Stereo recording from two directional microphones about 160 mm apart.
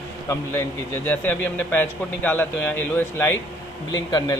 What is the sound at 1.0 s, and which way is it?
A man's voice, 10° left (ahead or behind).